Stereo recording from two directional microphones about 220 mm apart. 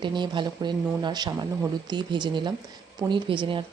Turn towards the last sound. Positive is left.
turn(degrees=-20)  # may be behind; listen again after turning